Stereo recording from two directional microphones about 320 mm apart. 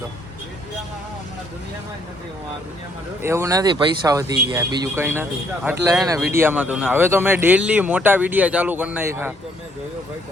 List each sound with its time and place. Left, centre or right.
3.2 s speech: centre